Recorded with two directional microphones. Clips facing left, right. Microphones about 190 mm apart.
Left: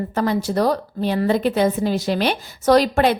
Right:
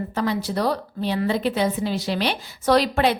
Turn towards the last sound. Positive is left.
turn(degrees=45)  # may be behind; listen again after turning